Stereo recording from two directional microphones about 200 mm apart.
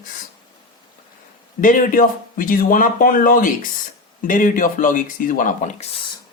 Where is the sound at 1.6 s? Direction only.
45° left (ahead or behind).